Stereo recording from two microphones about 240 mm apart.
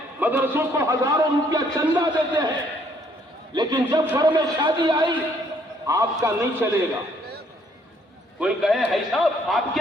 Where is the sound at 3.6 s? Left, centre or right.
Centre.